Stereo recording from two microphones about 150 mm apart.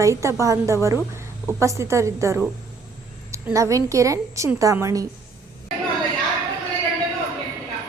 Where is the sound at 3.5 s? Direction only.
20° right (ahead or behind).